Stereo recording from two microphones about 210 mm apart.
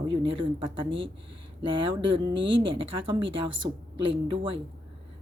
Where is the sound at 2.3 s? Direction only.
60° right (ahead or behind).